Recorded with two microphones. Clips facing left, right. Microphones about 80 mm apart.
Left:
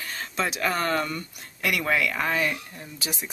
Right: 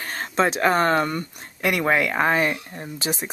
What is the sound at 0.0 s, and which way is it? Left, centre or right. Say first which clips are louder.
Speech: right 7 dB; right.